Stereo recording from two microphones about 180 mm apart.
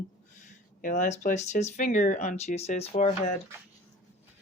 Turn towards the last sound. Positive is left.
turn(degrees=35)  # may be behind; listen again after turning